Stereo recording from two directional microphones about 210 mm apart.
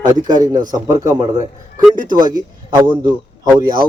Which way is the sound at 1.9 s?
40° right (ahead or behind).